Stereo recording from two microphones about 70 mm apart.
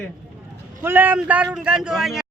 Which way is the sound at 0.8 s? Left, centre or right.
Right.